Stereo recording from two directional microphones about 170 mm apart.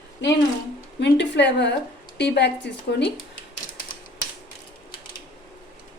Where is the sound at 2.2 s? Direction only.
90° left.